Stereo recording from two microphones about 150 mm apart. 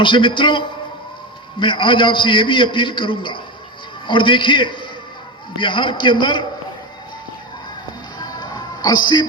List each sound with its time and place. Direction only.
0.0 s a man's voice: 35° left (ahead or behind)
8.2 s music: 25° left (ahead or behind)